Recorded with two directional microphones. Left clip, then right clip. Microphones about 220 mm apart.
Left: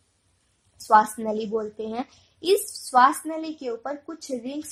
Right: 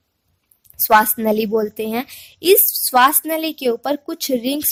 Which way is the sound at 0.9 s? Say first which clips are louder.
Right 5 dB; 40° right (ahead or behind).